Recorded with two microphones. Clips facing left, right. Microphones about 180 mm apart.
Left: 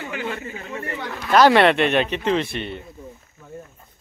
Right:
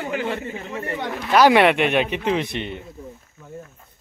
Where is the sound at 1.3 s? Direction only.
10° right (ahead or behind).